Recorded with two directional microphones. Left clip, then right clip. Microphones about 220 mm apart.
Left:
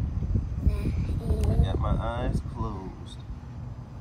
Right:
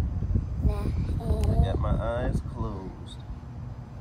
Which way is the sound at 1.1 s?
10° right (ahead or behind).